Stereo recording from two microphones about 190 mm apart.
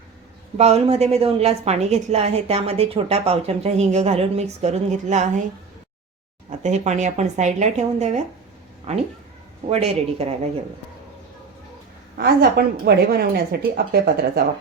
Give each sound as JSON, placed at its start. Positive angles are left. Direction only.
{"t": 0.5, "sound": "a woman's voice", "side_deg": -35}
{"t": 6.6, "sound": "a woman's voice", "side_deg": -40}
{"t": 12.1, "sound": "a woman's voice", "side_deg": -55}